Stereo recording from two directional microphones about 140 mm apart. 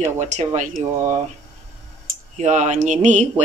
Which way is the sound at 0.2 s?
55° right (ahead or behind).